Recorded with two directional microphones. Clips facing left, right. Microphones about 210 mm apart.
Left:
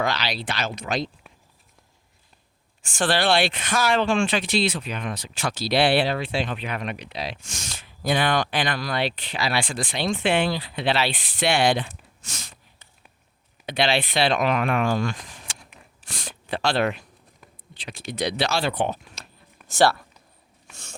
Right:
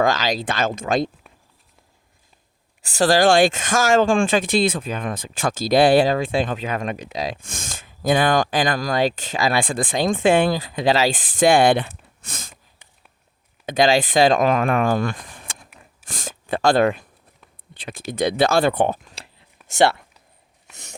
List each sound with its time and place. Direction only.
0.0 s speech: 45° right (ahead or behind)
2.8 s speech: 40° right (ahead or behind)
13.7 s speech: 45° right (ahead or behind)
18.1 s speech: 50° right (ahead or behind)
19.2 s a sound: 30° right (ahead or behind)
19.7 s speech: 20° right (ahead or behind)